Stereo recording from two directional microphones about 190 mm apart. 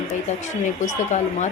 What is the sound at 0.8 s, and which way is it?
Speech, 40° left (ahead or behind).